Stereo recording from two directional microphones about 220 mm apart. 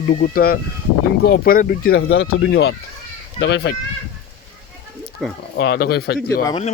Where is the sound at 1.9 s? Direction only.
60° left (ahead or behind).